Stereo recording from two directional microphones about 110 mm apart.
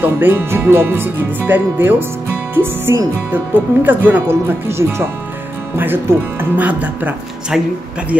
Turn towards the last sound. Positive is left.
turn(degrees=-10)  # may be behind; listen again after turning